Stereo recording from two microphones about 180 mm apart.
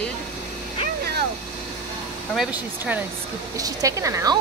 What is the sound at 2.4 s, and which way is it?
Speech, 10° right (ahead or behind).